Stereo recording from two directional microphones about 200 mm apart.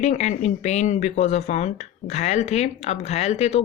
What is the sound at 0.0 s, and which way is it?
Speech, 35° left (ahead or behind).